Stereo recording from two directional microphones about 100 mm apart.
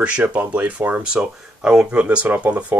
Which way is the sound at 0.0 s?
15° right (ahead or behind).